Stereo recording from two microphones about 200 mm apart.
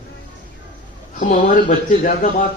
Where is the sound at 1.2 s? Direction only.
40° left (ahead or behind).